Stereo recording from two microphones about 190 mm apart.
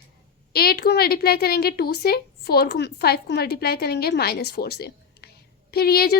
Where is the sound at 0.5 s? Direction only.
55° left (ahead or behind).